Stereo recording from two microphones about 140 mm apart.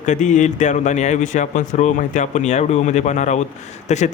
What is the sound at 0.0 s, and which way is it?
Speech, 60° left (ahead or behind).